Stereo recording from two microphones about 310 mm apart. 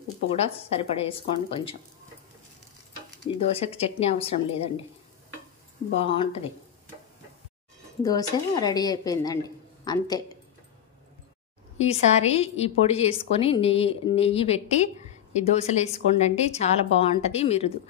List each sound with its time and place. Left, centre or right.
0.4 s a woman's voice: centre
3.7 s a woman's voice: centre
6.0 s a woman's voice: centre
8.0 s a woman's voice: centre
11.8 s a woman's voice: left